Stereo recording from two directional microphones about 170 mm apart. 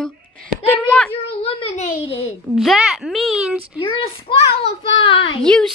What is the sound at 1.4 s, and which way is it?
Speech, 45° left (ahead or behind).